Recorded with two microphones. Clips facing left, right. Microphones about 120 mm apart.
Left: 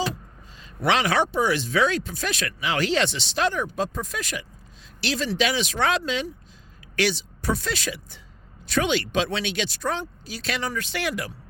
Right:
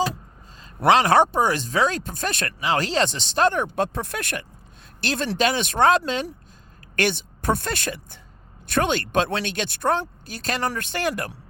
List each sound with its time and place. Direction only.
0.9 s speech: 40° right (ahead or behind)
2.6 s speech: 35° right (ahead or behind)